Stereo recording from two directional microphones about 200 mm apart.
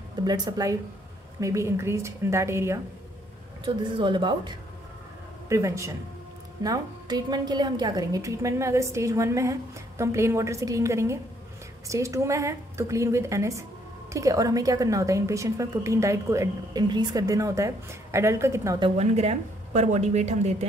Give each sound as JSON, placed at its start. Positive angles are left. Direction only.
{"t": 0.2, "sound": "a woman's voice", "side_deg": -20}
{"t": 18.9, "sound": "a woman's voice", "side_deg": -30}